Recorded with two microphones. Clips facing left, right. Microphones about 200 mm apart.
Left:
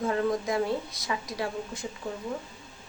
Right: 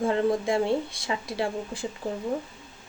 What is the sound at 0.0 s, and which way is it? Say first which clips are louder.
A woman's voice: right 3 dB; 25° right (ahead or behind).